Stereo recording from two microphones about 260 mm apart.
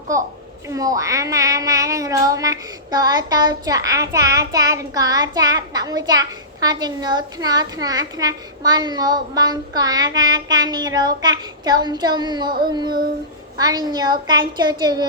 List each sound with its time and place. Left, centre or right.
0.1 s a child's voice: centre